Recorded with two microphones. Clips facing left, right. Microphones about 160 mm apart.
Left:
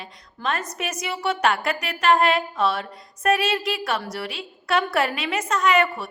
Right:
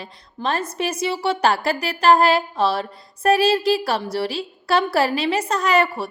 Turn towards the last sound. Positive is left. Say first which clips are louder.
# right 1 dB
turn(degrees=-35)  # may be behind; listen again after turning